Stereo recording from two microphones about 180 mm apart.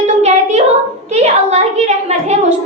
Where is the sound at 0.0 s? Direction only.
40° right (ahead or behind).